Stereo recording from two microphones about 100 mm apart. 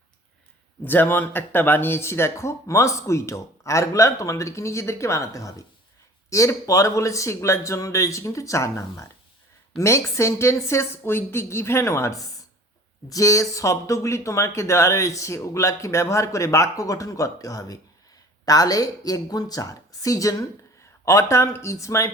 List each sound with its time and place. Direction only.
0.9 s speech: 20° left (ahead or behind)